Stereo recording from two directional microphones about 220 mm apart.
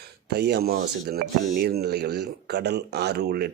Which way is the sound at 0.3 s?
45° right (ahead or behind).